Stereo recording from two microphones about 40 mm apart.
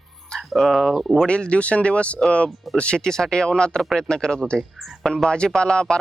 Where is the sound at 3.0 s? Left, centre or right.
Centre.